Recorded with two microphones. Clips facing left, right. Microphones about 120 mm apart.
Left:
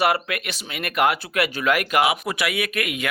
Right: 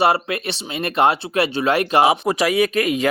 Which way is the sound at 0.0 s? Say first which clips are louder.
Right 4 dB; 30° right (ahead or behind).